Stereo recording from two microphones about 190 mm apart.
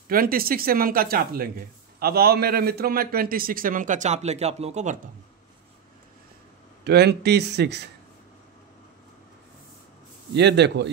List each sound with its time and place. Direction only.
0.1 s a man's voice: 50° right (ahead or behind)
6.8 s speech: 60° right (ahead or behind)
10.3 s speech: 60° right (ahead or behind)